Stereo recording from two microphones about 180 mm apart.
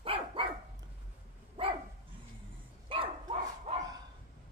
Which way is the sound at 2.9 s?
30° right (ahead or behind).